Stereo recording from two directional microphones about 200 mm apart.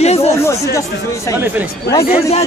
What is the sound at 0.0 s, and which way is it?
Chatter, 30° left (ahead or behind).